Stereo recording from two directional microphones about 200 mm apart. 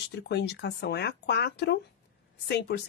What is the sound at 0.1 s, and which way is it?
A woman's voice, 55° left (ahead or behind).